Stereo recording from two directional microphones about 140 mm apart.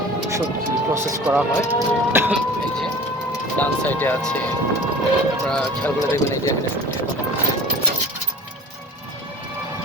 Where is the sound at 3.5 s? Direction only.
10° left (ahead or behind).